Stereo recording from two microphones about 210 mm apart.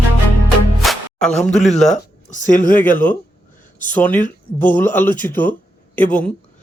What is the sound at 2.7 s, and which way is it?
Speech, 10° left (ahead or behind).